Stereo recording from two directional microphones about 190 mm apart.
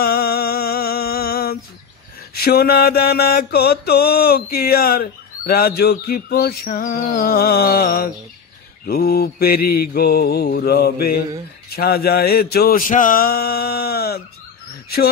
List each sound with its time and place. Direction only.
0.0 s mantra: 55° left (ahead or behind)